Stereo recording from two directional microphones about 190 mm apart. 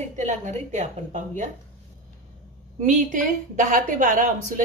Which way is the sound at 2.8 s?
40° right (ahead or behind).